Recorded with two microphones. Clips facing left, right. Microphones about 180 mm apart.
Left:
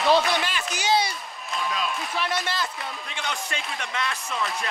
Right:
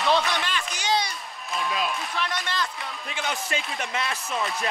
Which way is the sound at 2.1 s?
5° left (ahead or behind).